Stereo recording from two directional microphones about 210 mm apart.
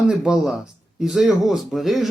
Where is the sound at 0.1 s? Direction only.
5° right (ahead or behind).